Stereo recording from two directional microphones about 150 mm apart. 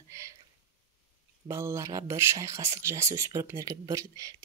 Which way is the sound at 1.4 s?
20° right (ahead or behind).